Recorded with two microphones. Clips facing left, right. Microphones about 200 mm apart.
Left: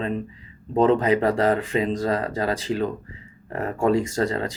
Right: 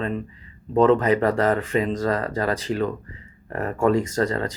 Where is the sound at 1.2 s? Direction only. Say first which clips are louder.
Even; 30° left (ahead or behind).